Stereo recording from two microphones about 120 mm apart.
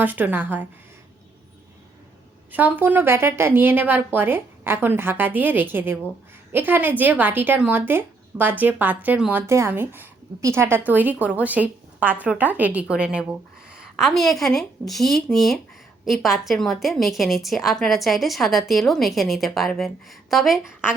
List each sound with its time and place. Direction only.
0.0 s a woman's voice: 15° right (ahead or behind)
2.5 s a woman's voice: 15° right (ahead or behind)